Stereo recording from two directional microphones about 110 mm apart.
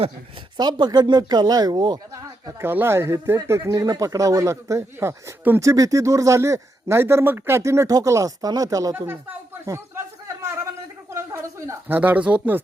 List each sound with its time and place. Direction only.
0.5 s speech: 40° right (ahead or behind)
2.5 s speech: 20° right (ahead or behind)
11.1 s a sound: 30° right (ahead or behind)
11.9 s speech: 15° right (ahead or behind)